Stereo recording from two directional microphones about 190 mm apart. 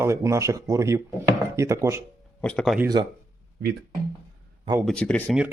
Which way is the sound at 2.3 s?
5° left (ahead or behind).